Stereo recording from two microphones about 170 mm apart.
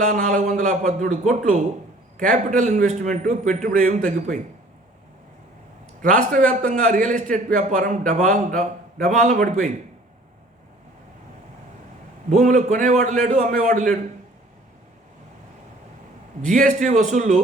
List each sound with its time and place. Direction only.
0.0 s a man's voice: 50° right (ahead or behind)
6.0 s a man's voice: 50° right (ahead or behind)
12.3 s a man's voice: 45° right (ahead or behind)
16.4 s a man's voice: 50° right (ahead or behind)